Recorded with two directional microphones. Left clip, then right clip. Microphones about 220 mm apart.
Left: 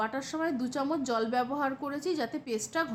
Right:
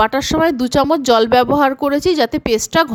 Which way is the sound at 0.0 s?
45° right (ahead or behind).